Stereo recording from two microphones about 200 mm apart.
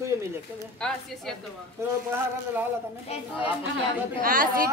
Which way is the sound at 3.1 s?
30° left (ahead or behind).